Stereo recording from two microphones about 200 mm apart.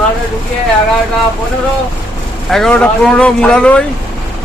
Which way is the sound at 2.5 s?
5° left (ahead or behind).